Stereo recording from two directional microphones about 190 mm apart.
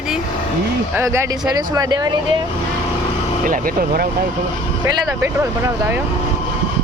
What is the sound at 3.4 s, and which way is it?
Speech, 45° right (ahead or behind).